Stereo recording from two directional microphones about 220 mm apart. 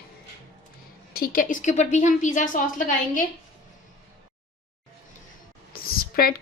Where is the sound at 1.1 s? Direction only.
40° left (ahead or behind).